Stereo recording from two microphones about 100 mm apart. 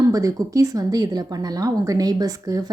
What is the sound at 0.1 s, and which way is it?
Speech, 35° right (ahead or behind).